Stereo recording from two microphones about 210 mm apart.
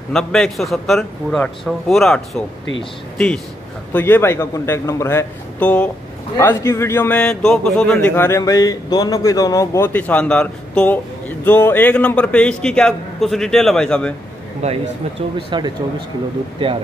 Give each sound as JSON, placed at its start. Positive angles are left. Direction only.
{"t": 0.1, "sound": "a man's voice", "side_deg": 0}
{"t": 3.9, "sound": "a man's voice", "side_deg": 10}
{"t": 14.6, "sound": "speech", "side_deg": -30}